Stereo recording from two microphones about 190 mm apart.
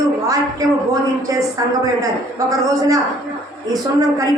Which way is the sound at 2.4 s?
20° right (ahead or behind).